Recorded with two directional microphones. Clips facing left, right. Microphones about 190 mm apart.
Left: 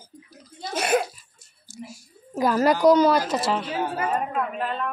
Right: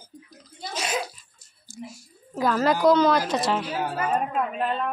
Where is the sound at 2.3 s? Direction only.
10° left (ahead or behind).